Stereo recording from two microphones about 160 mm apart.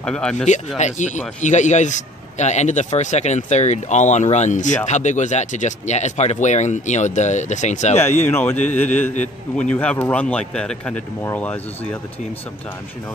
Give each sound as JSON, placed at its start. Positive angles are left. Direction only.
{"t": 0.0, "sound": "speech", "side_deg": 5}
{"t": 0.7, "sound": "a man's voice", "side_deg": 45}
{"t": 8.3, "sound": "speech", "side_deg": 15}